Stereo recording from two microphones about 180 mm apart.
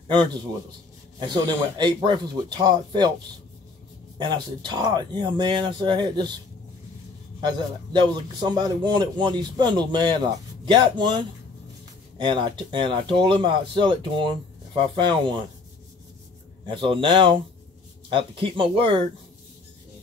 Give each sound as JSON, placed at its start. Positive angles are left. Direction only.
{"t": 0.1, "sound": "a man's voice", "side_deg": -25}
{"t": 4.2, "sound": "a man's voice", "side_deg": -25}
{"t": 7.3, "sound": "a man's voice", "side_deg": -25}
{"t": 16.6, "sound": "a man's voice", "side_deg": -30}